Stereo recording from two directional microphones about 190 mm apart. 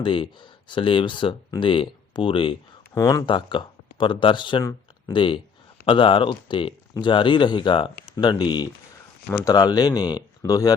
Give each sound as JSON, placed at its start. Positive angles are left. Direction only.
{"t": 0.0, "sound": "speech", "side_deg": 25}